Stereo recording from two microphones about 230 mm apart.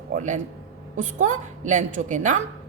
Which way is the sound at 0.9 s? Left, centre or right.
Right.